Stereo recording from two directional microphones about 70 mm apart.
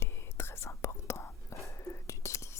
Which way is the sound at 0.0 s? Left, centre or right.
Left.